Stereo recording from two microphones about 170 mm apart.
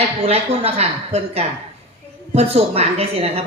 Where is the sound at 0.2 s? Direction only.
35° right (ahead or behind).